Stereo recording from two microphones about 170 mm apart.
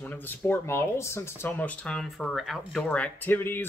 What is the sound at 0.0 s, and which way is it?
Speech, 10° left (ahead or behind).